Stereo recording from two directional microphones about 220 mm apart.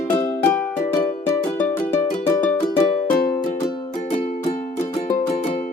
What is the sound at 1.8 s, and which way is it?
Music, 35° left (ahead or behind).